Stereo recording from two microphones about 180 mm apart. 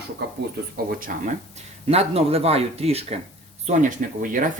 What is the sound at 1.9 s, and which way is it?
Speech, 35° right (ahead or behind).